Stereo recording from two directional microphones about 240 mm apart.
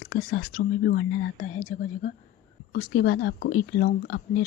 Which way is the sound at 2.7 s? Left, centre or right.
Left.